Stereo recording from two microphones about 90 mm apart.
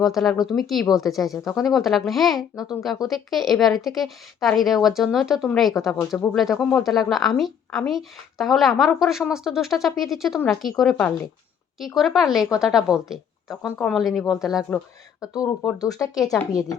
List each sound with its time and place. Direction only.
0.0 s a woman's voice: centre (ahead or behind)
15.2 s speech: 40° left (ahead or behind)